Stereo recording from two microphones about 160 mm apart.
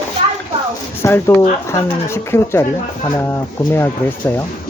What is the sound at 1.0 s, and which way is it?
Speech, 15° left (ahead or behind).